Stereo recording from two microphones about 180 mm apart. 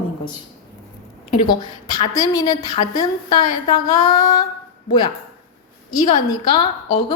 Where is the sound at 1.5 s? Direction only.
25° left (ahead or behind).